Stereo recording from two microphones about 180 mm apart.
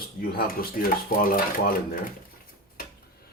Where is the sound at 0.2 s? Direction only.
55° left (ahead or behind).